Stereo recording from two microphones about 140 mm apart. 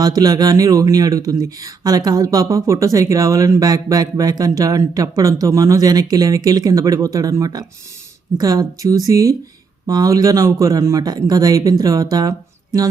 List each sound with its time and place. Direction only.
0.0 s speech: 25° right (ahead or behind)